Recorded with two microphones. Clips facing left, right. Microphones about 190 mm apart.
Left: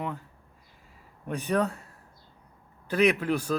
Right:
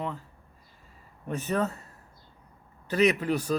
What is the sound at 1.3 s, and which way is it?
Speech, centre (ahead or behind).